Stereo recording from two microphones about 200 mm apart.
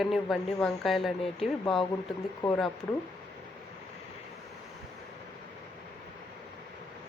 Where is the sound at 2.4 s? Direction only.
25° left (ahead or behind).